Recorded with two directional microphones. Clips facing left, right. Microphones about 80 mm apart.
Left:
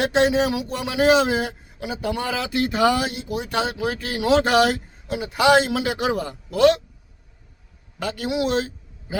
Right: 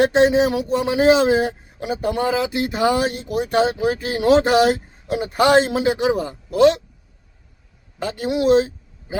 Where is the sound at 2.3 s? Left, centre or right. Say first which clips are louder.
Right 2 dB; right.